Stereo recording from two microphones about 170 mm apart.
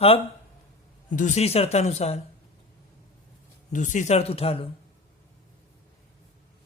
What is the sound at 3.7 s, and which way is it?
Speech, 45° left (ahead or behind).